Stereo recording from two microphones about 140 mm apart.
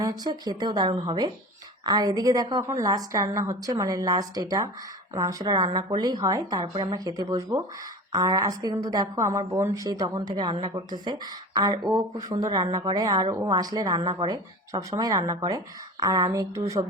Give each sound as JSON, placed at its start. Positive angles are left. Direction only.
{"t": 0.0, "sound": "a woman's voice", "side_deg": -30}